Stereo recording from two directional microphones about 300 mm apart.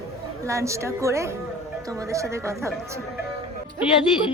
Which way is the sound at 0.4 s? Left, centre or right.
Centre.